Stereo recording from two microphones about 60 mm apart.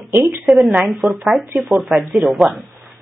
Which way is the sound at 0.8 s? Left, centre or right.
Centre.